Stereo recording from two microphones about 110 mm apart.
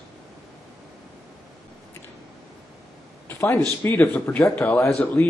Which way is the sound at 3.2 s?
20° left (ahead or behind).